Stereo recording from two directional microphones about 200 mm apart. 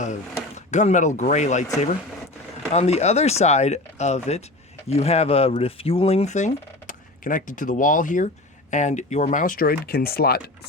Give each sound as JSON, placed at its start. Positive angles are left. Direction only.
{"t": 0.0, "sound": "speech", "side_deg": 35}